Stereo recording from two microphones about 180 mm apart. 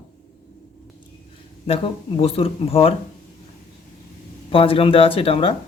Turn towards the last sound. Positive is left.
turn(degrees=30)  # may be behind; listen again after turning